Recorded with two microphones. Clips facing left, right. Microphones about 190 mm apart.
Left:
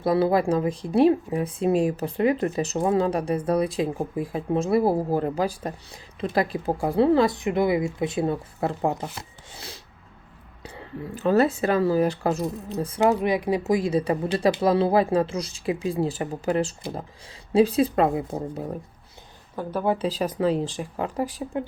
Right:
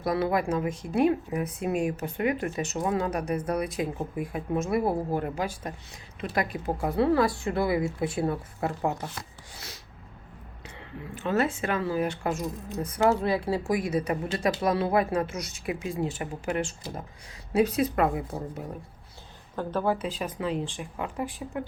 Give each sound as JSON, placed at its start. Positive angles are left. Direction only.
{"t": 0.0, "sound": "speech", "side_deg": 30}
{"t": 10.6, "sound": "speech", "side_deg": 35}
{"t": 13.0, "sound": "speech", "side_deg": 15}
{"t": 19.5, "sound": "speech", "side_deg": 10}
{"t": 19.9, "sound": "speech", "side_deg": 35}